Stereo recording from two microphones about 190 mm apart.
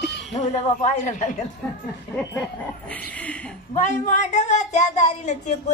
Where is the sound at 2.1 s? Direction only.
10° left (ahead or behind).